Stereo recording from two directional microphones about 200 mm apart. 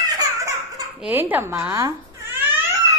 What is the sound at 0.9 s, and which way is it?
A child's voice, 10° right (ahead or behind).